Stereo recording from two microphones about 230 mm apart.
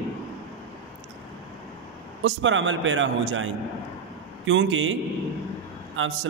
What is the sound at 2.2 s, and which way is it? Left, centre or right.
A man's voice, right.